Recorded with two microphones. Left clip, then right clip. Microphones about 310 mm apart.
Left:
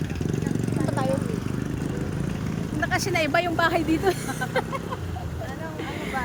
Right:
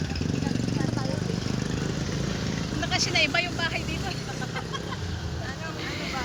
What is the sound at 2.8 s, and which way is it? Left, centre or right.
Speech, centre.